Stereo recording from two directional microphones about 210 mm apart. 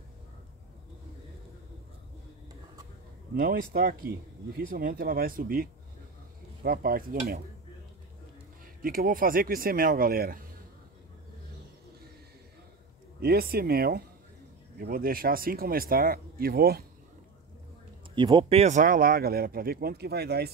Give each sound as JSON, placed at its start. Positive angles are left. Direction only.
{"t": 3.3, "sound": "speech", "side_deg": -45}
{"t": 8.8, "sound": "speech", "side_deg": -45}
{"t": 13.2, "sound": "speech", "side_deg": -45}
{"t": 18.1, "sound": "speech", "side_deg": -20}